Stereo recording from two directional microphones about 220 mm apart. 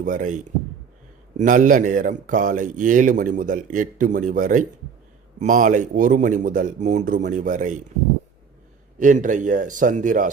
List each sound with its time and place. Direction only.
0.0 s speech: 35° right (ahead or behind)
9.0 s speech: 35° right (ahead or behind)